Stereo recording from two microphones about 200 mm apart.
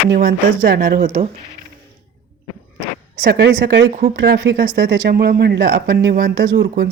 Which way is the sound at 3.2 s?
55° right (ahead or behind).